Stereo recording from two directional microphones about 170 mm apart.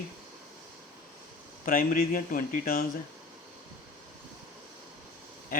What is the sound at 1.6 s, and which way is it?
Speech, 55° left (ahead or behind).